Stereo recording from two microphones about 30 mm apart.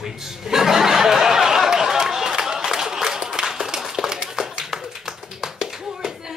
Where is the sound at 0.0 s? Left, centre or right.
Centre.